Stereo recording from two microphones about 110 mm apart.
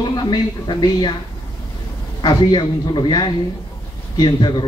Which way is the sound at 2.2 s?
45° left (ahead or behind).